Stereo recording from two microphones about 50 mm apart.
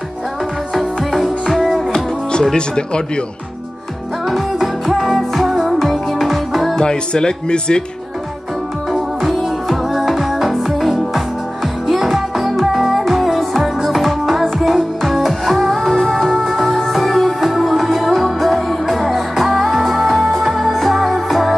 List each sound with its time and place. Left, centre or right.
0.7 s music: centre
1.9 s music: centre
2.5 s speech: centre
4.3 s music: centre
6.8 s speech: centre
9.2 s music: centre